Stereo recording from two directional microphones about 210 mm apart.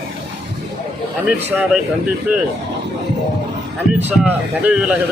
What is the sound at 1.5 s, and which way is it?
Speech, 5° right (ahead or behind).